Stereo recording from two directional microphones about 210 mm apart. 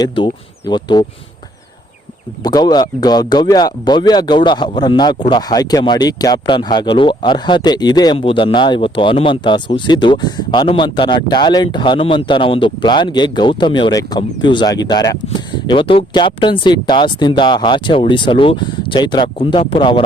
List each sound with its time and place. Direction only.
0.7 s speech: 20° left (ahead or behind)
2.4 s speech: 20° left (ahead or behind)